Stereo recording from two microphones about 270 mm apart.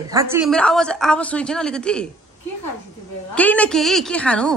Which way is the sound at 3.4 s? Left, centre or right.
Centre.